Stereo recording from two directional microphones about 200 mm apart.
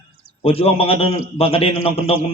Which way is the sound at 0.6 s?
30° left (ahead or behind).